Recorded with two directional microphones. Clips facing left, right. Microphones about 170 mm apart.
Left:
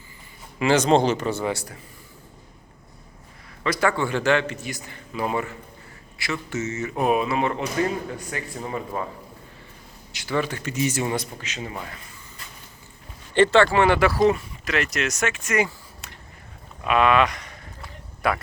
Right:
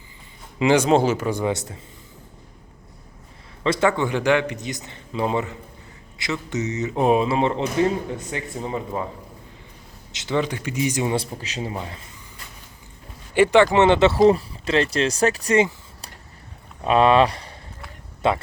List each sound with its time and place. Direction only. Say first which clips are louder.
0.6 s speech: right 1 dB; 15° right (ahead or behind)
3.6 s speech: right 3 dB; 25° right (ahead or behind)
10.1 s speech: right 2 dB; 20° right (ahead or behind)
11.1 s speech: right 3 dB; 30° right (ahead or behind)
13.3 s speech: right 2 dB; 10° right (ahead or behind); by 15.5 s 35° right (ahead or behind)
16.8 s speech: right 3 dB; 30° right (ahead or behind)